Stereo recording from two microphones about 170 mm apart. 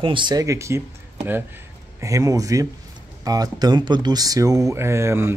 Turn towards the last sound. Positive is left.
turn(degrees=-15)  # may be behind; listen again after turning